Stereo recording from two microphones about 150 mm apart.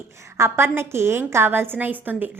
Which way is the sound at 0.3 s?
15° right (ahead or behind).